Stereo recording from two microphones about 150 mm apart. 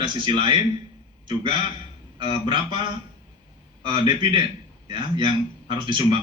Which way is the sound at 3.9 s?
30° right (ahead or behind).